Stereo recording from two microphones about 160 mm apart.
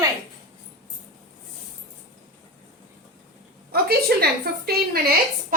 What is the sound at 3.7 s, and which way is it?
Speech, 75° right (ahead or behind).